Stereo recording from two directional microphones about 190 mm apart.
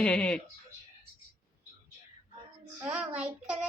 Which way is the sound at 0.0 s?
5° left (ahead or behind).